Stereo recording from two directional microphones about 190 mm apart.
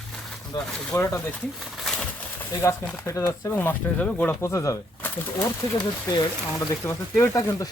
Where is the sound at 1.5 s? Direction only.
Centre (ahead or behind).